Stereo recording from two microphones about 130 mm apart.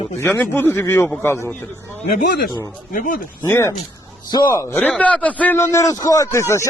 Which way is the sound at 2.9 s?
90° left.